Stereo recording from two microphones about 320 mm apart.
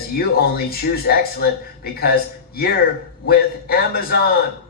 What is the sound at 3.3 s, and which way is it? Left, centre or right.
Speech, left.